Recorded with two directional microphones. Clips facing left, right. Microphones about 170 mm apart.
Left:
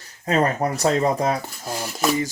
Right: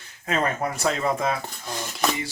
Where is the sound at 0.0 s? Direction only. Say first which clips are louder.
Left 5 dB; 35° left (ahead or behind).